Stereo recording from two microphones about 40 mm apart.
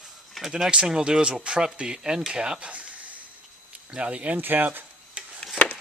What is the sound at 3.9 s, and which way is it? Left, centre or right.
Speech, right.